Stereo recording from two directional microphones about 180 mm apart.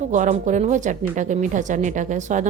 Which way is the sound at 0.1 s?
45° right (ahead or behind).